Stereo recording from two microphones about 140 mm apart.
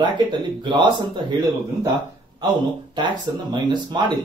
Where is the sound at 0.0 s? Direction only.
35° right (ahead or behind).